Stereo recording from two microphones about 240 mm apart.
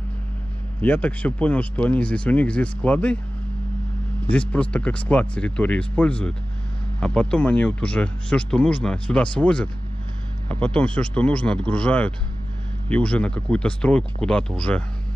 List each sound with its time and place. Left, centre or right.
0.7 s speech: centre
4.3 s speech: centre